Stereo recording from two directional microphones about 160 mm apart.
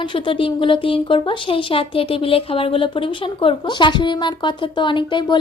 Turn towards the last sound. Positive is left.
turn(degrees=30)  # may be behind; listen again after turning